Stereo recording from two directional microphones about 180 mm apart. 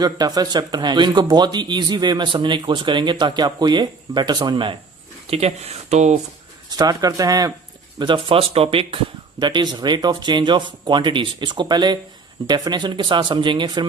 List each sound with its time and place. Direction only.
0.0 s speech: 20° right (ahead or behind); by 6.1 s 40° right (ahead or behind)
6.7 s speech: 20° right (ahead or behind)